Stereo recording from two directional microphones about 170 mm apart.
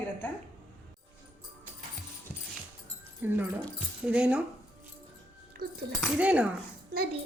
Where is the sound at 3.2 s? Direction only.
10° right (ahead or behind).